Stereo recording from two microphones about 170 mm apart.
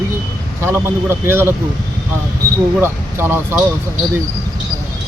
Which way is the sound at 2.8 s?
15° right (ahead or behind).